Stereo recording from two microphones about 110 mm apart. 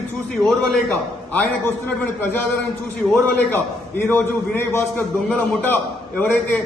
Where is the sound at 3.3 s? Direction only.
20° left (ahead or behind).